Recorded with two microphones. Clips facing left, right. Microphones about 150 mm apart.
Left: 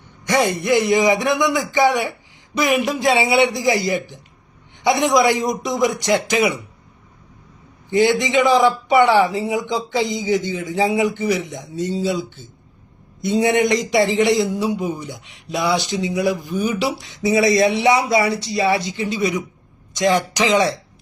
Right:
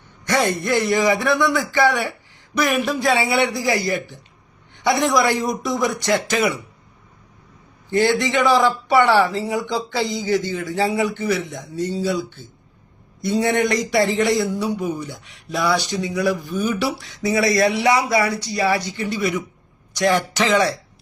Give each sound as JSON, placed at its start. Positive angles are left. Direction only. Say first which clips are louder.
{"t": 0.3, "sound": "a man's voice", "louder": "left 2 dB", "side_deg": 15}
{"t": 7.9, "sound": "a man's voice", "louder": "left 2 dB", "side_deg": 15}